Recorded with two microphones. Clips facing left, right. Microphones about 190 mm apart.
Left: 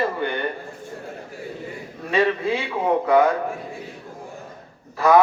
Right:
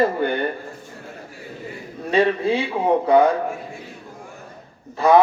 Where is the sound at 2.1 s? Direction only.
30° right (ahead or behind).